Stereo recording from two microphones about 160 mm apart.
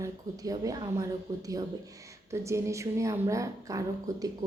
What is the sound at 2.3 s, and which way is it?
A woman's voice, 20° right (ahead or behind).